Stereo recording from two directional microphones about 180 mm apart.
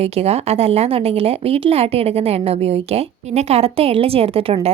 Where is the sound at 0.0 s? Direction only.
35° right (ahead or behind).